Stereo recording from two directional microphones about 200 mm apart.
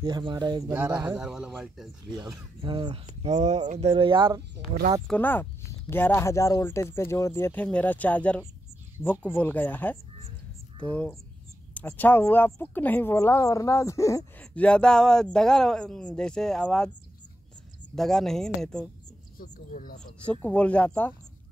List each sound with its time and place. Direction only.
0.0 s speech: 20° right (ahead or behind)
1.0 s a woman's voice: 5° right (ahead or behind)
2.0 s speech: 20° right (ahead or behind)
5.0 s speech: 10° left (ahead or behind)
17.9 s a woman's voice: centre (ahead or behind)
19.7 s speech: 45° left (ahead or behind)
20.2 s speech: 5° left (ahead or behind)